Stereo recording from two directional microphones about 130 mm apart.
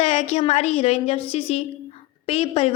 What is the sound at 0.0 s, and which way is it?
A woman's voice, 55° left (ahead or behind).